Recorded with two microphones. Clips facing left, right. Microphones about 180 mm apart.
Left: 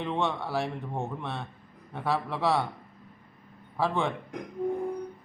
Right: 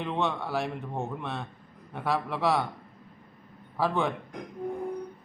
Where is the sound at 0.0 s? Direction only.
Centre (ahead or behind).